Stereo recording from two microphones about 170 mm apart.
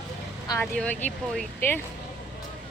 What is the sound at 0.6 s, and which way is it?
Speech, 5° left (ahead or behind).